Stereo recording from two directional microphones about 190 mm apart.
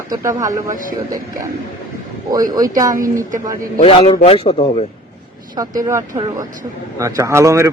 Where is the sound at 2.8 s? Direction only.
15° right (ahead or behind).